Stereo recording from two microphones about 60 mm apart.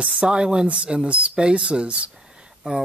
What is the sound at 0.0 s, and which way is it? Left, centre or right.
Speech, centre.